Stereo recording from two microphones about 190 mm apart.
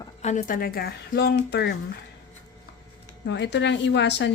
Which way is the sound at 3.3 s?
65° left (ahead or behind).